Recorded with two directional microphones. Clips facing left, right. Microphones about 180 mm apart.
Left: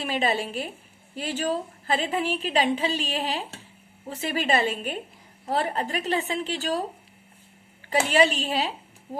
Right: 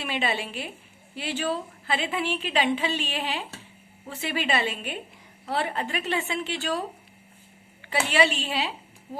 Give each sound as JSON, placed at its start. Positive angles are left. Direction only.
{"t": 0.0, "sound": "a woman's voice", "side_deg": 40}